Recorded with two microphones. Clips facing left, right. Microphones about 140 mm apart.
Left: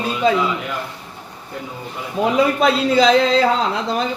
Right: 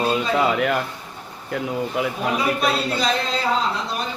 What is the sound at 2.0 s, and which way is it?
Speech, 85° right.